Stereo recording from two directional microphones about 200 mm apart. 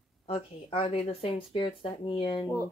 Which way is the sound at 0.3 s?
30° left (ahead or behind).